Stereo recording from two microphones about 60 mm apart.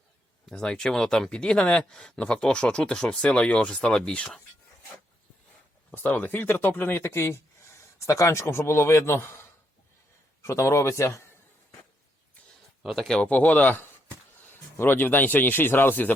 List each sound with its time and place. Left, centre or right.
0.4 s speech: centre
5.9 s speech: left
7.9 s speech: left
12.8 s speech: centre
13.2 s speech: left